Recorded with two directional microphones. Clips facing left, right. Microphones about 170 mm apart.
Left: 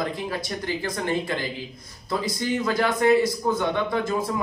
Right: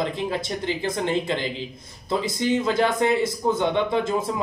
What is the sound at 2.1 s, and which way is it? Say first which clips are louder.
Speech: right 3 dB; 20° right (ahead or behind).